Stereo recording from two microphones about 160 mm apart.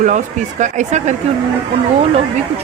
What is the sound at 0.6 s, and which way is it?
Speech, 50° right (ahead or behind).